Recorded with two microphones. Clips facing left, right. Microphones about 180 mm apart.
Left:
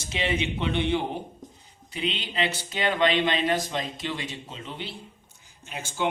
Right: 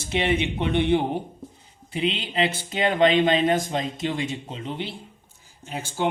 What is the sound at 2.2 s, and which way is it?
Speech, 25° right (ahead or behind).